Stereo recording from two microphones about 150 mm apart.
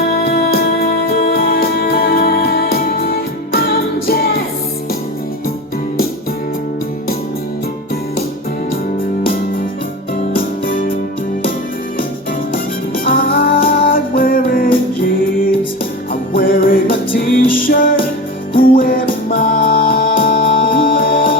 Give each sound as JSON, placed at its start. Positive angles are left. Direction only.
{"t": 0.1, "sound": "music", "side_deg": 80}
{"t": 10.3, "sound": "music", "side_deg": 70}
{"t": 13.1, "sound": "music", "side_deg": 75}
{"t": 16.3, "sound": "music", "side_deg": 75}